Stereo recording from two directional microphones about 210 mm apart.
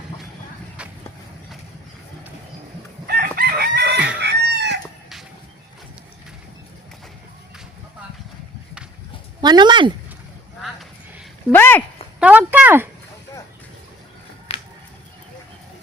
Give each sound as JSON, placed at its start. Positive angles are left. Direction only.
{"t": 0.8, "sound": "a sound", "side_deg": -5}
{"t": 3.1, "sound": "chicken", "side_deg": -45}
{"t": 9.4, "sound": "speech", "side_deg": -20}
{"t": 11.5, "sound": "speech", "side_deg": 10}
{"t": 12.2, "sound": "speech", "side_deg": -5}
{"t": 14.5, "sound": "a sound", "side_deg": 25}